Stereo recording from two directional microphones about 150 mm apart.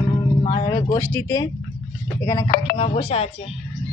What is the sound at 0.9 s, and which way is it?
A woman's voice, 15° left (ahead or behind).